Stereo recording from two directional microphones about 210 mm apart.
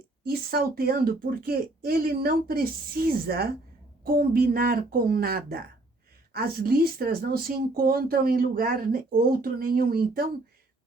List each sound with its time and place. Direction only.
0.3 s speech: 45° right (ahead or behind)